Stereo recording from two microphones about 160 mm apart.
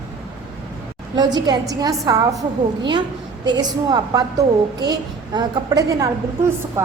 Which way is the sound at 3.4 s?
25° right (ahead or behind).